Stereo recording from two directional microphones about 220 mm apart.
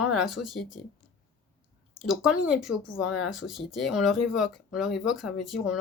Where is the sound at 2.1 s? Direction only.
5° right (ahead or behind).